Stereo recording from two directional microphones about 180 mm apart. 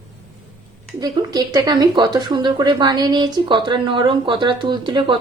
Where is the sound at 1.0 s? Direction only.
20° right (ahead or behind).